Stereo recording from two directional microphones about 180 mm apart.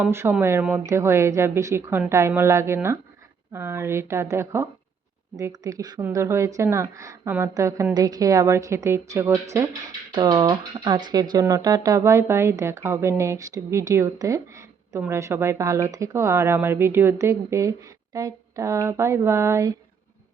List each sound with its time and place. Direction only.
0.0 s speech: 15° right (ahead or behind)